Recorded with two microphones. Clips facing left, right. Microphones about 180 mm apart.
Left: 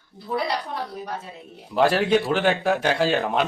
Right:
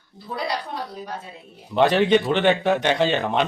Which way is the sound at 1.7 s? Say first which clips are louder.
Right 2 dB; 5° left (ahead or behind).